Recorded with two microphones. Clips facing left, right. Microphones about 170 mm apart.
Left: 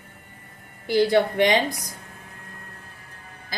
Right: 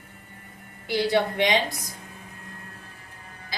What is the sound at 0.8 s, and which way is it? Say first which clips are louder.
Speech: left 4 dB; 50° left (ahead or behind).